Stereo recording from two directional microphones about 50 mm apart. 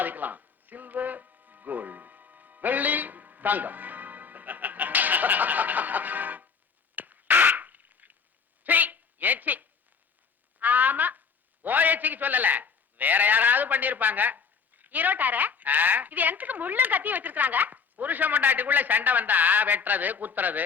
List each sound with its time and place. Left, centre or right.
0.0 s music: right
6.9 s a sound: right
11.6 s a man's voice: right